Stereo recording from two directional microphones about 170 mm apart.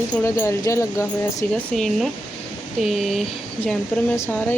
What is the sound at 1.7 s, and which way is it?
Speech, centre (ahead or behind).